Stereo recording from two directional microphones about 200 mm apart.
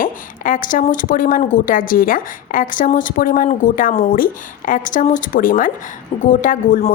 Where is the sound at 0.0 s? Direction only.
40° left (ahead or behind).